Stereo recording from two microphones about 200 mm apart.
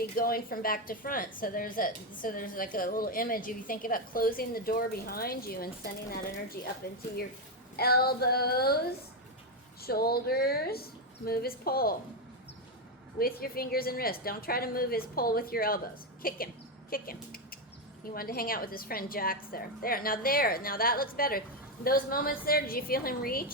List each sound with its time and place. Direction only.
0.0 s a woman's voice: 45° left (ahead or behind)
13.1 s a woman's voice: 50° left (ahead or behind)